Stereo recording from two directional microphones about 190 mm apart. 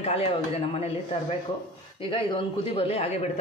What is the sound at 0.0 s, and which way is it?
Speech, 30° left (ahead or behind).